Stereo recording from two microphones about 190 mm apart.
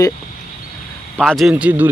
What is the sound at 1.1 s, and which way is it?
Speech, centre (ahead or behind).